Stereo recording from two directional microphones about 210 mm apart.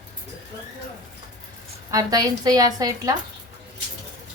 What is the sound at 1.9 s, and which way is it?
A woman's voice, 15° right (ahead or behind).